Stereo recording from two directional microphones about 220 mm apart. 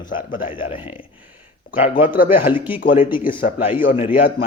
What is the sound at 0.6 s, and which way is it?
A man's voice, 25° left (ahead or behind).